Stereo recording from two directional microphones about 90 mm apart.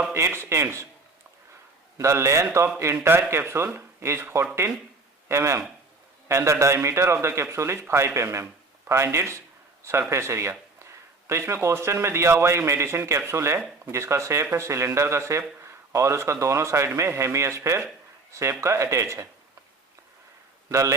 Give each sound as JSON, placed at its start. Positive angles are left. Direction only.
{"t": 0.1, "sound": "speech", "side_deg": -30}
{"t": 2.0, "sound": "speech", "side_deg": -35}
{"t": 20.7, "sound": "a man's voice", "side_deg": -35}